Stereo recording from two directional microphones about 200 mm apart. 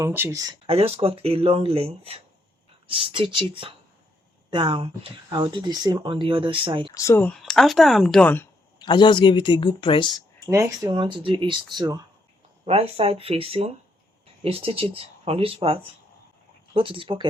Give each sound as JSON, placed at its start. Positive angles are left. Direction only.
{"t": 0.0, "sound": "speech", "side_deg": -15}
{"t": 0.7, "sound": "speech", "side_deg": -30}
{"t": 6.9, "sound": "speech", "side_deg": 15}
{"t": 8.8, "sound": "speech", "side_deg": 25}
{"t": 10.4, "sound": "speech", "side_deg": -15}